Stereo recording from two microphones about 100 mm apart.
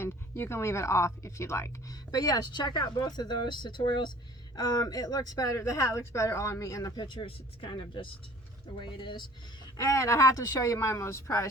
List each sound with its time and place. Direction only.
0.0 s speech: 25° left (ahead or behind); by 4.1 s 50° left (ahead or behind)
4.5 s speech: 40° left (ahead or behind)
9.7 s speech: 30° left (ahead or behind)